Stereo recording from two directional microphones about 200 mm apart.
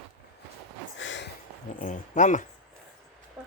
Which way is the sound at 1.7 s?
40° left (ahead or behind).